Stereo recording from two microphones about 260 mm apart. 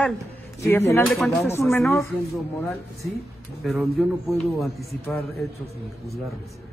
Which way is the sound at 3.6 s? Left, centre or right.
Centre.